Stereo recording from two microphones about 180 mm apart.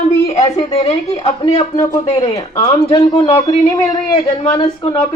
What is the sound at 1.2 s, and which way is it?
A man's voice, 30° left (ahead or behind).